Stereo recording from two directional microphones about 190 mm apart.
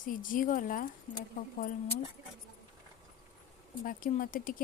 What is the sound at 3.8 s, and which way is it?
Speech, 45° left (ahead or behind).